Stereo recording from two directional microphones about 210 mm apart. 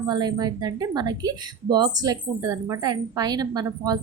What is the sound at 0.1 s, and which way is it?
Speech, 20° right (ahead or behind).